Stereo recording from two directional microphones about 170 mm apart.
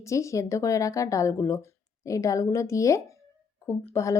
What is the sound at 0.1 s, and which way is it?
A woman's voice, 20° left (ahead or behind).